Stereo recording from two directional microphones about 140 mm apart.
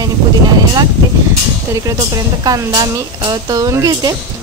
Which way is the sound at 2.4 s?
25° right (ahead or behind).